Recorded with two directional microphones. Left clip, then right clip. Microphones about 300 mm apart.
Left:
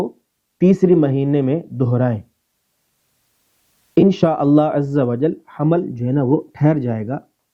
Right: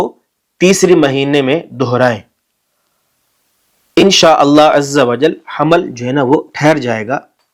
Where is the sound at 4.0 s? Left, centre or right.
Centre.